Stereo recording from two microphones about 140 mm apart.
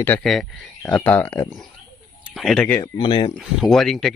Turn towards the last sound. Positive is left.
turn(degrees=0)  # may be behind; listen again after turning